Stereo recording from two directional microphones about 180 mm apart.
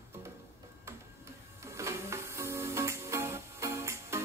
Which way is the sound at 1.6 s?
15° right (ahead or behind).